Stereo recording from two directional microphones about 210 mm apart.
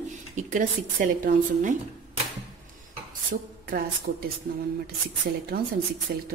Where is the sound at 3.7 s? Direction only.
45° right (ahead or behind).